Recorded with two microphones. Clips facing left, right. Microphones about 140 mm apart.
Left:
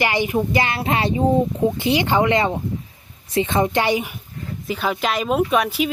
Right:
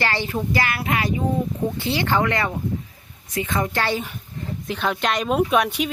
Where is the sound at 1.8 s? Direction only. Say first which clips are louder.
Left 2 dB; 15° left (ahead or behind).